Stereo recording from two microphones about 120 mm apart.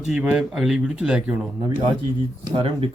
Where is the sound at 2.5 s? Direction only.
50° right (ahead or behind).